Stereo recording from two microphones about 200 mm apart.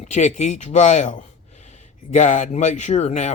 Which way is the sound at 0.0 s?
35° left (ahead or behind).